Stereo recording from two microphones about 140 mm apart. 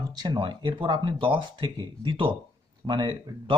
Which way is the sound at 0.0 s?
30° right (ahead or behind).